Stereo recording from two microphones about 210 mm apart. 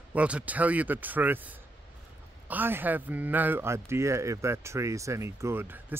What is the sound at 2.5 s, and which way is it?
Speech, 10° right (ahead or behind).